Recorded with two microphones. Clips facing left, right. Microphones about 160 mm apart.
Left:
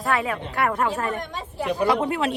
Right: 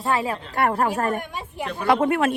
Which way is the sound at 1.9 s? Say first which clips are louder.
Right 7 dB; 60° right (ahead or behind).